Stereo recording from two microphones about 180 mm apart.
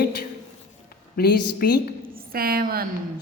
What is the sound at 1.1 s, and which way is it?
Speech, 60° left (ahead or behind).